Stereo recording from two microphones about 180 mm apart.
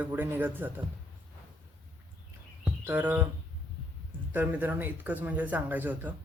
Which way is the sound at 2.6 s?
10° right (ahead or behind).